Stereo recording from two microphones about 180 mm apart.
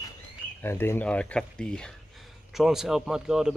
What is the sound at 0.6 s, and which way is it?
A man's voice, 15° left (ahead or behind).